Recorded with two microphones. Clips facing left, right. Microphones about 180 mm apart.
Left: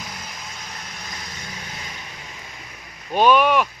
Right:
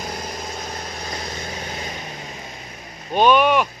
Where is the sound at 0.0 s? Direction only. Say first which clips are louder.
Right 7 dB; 45° right (ahead or behind).